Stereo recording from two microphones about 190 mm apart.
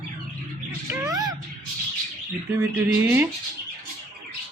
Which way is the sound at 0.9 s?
15° right (ahead or behind).